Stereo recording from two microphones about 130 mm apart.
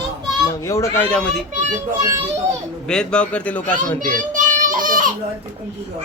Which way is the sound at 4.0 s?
80° right.